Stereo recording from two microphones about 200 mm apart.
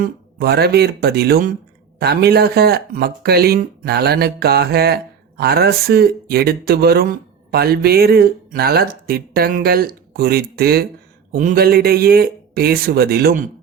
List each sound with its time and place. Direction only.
0.0 s speech: 55° right (ahead or behind)